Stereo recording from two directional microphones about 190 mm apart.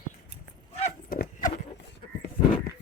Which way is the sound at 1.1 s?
45° left (ahead or behind).